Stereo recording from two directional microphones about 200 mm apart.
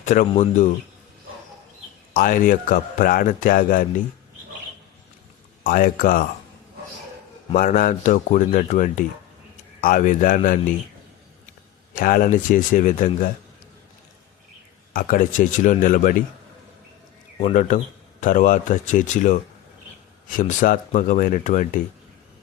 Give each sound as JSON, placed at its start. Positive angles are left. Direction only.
{"t": 0.0, "sound": "a man's voice", "side_deg": 40}
{"t": 2.1, "sound": "a man's voice", "side_deg": 45}
{"t": 5.6, "sound": "a man's voice", "side_deg": 45}
{"t": 7.5, "sound": "a man's voice", "side_deg": 45}
{"t": 11.9, "sound": "a man's voice", "side_deg": 45}
{"t": 14.9, "sound": "a man's voice", "side_deg": 45}
{"t": 17.4, "sound": "a man's voice", "side_deg": 40}